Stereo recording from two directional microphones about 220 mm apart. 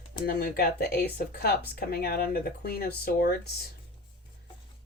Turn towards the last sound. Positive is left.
turn(degrees=45)  # may be behind; listen again after turning